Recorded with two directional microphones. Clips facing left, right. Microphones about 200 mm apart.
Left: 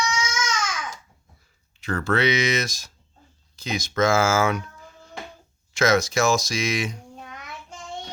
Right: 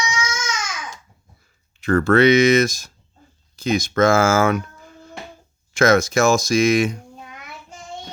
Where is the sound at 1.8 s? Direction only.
50° right (ahead or behind).